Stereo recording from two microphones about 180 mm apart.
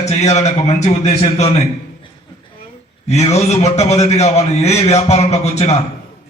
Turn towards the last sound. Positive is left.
turn(degrees=40)  # may be behind; listen again after turning